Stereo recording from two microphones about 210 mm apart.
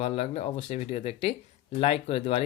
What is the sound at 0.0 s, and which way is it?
Speech, 30° left (ahead or behind).